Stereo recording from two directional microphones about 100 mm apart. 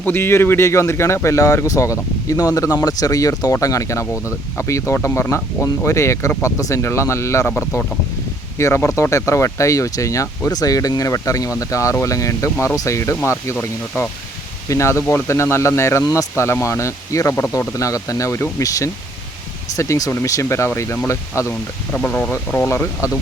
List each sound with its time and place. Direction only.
0.0 s speech: 20° left (ahead or behind)
8.5 s speech: 25° left (ahead or behind)
21.9 s speech: 15° left (ahead or behind); by 23.1 s 30° left (ahead or behind)